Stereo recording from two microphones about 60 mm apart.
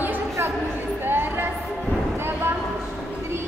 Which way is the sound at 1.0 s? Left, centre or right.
Right.